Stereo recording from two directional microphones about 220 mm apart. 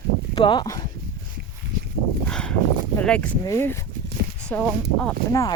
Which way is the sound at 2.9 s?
5° left (ahead or behind).